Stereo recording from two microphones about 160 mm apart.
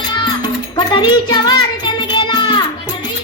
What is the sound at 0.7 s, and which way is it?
Music, 25° left (ahead or behind).